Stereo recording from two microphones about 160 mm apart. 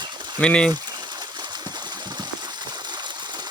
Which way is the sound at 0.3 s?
5° left (ahead or behind).